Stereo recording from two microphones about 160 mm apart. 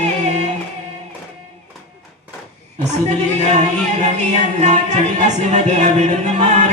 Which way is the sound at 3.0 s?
45° right (ahead or behind).